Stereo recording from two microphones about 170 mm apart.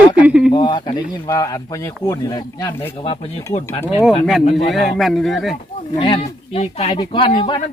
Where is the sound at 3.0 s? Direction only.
30° left (ahead or behind).